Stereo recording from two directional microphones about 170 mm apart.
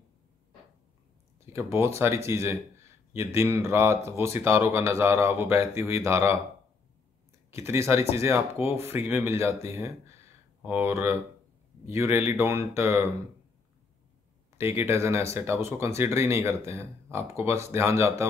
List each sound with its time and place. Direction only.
1.4 s speech: 15° right (ahead or behind)
7.5 s speech: 15° right (ahead or behind)
14.9 s speech: 15° right (ahead or behind)